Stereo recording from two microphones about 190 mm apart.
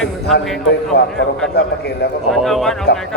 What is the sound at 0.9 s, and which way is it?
A man's voice, 60° left (ahead or behind).